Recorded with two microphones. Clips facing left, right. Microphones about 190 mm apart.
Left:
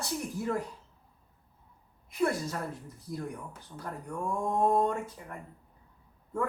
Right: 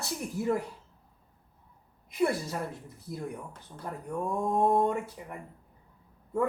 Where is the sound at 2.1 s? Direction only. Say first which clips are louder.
Right 1 dB; 15° right (ahead or behind).